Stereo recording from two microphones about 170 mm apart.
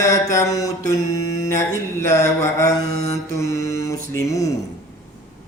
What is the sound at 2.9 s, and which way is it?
Mantra, 40° left (ahead or behind).